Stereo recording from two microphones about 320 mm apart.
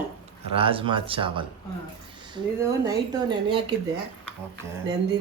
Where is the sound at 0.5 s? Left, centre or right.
Centre.